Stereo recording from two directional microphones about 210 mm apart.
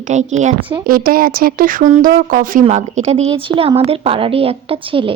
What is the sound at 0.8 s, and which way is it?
Speech, 45° right (ahead or behind).